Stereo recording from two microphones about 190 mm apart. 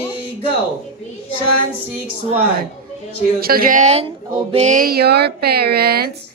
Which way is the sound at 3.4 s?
50° right (ahead or behind).